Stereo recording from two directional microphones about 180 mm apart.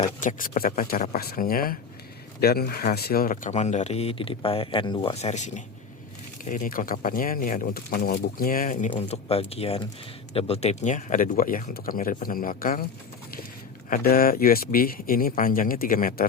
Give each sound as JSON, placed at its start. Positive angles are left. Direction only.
{"t": 0.2, "sound": "speech", "side_deg": 45}
{"t": 8.9, "sound": "speech", "side_deg": 35}
{"t": 13.9, "sound": "speech", "side_deg": 55}